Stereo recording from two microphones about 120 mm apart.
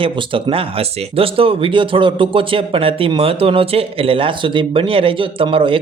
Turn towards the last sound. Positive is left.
turn(degrees=-45)  # may be behind; listen again after turning